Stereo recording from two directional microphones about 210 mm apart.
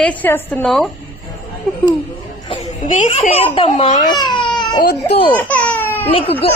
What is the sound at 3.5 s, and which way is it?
Speech, 25° left (ahead or behind).